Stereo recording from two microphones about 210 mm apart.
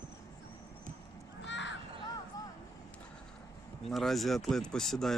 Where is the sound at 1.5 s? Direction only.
60° left (ahead or behind).